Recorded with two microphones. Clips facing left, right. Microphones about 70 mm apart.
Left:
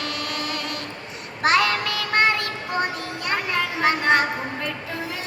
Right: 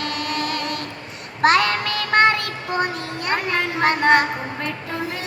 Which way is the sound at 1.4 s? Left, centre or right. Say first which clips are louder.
Right 3 dB; right.